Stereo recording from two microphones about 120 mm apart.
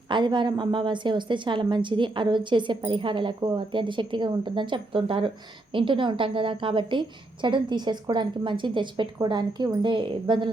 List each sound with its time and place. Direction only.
0.1 s a woman's voice: 40° right (ahead or behind)